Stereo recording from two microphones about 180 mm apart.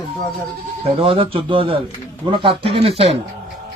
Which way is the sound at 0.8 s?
30° right (ahead or behind).